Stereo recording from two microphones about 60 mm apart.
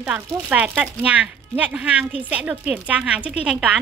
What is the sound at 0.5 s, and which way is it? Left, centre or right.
A woman's voice, right.